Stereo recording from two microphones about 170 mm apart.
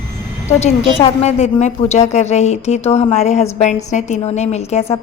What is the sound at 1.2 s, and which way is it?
A woman's voice, 40° left (ahead or behind).